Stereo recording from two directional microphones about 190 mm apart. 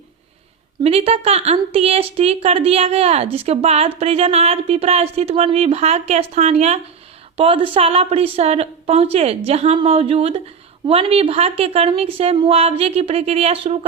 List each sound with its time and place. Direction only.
0.8 s a woman's voice: 30° right (ahead or behind)